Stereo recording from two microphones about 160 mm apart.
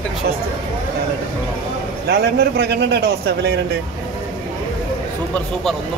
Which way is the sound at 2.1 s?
90° right.